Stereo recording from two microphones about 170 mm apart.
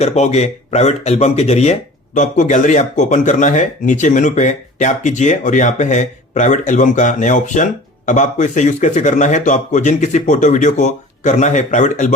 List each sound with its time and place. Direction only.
0.0 s speech: 40° left (ahead or behind)